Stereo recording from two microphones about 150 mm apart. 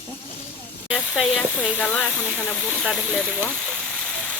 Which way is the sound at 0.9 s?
Centre (ahead or behind).